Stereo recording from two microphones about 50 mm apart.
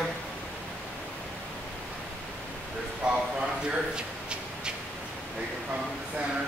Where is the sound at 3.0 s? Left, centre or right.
Centre.